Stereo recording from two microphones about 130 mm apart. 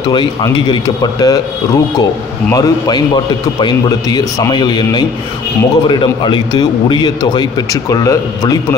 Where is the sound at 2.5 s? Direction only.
30° left (ahead or behind).